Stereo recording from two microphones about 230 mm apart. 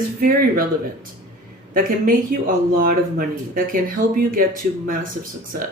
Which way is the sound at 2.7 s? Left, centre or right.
Right.